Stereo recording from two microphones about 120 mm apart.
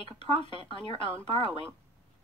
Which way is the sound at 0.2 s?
45° left (ahead or behind).